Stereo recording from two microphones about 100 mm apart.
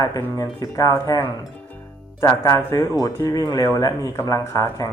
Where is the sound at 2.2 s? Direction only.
35° left (ahead or behind).